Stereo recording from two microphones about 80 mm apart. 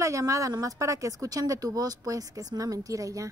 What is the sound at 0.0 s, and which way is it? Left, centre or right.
Speech, right.